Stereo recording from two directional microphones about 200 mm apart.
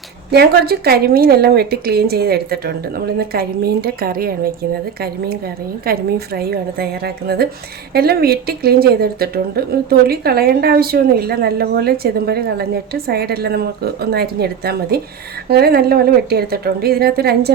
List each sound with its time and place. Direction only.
0.3 s speech: 50° right (ahead or behind)